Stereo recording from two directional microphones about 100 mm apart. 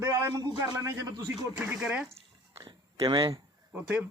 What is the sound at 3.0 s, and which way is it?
Speech, 50° right (ahead or behind).